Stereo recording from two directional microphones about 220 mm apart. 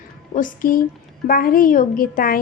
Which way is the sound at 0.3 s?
40° left (ahead or behind).